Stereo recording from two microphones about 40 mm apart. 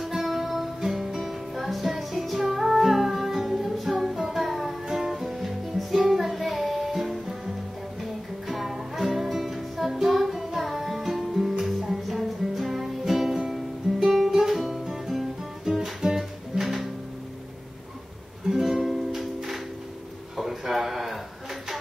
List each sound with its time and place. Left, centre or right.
0.0 s music: centre
14.1 s guitar: centre
18.5 s music: centre
20.3 s a sound: centre